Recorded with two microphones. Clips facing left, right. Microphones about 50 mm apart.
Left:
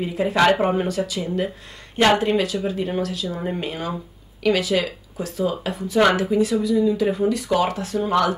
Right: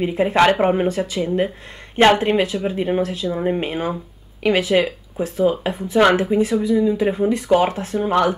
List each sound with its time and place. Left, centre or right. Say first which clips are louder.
0.0 s speech: right 3 dB; right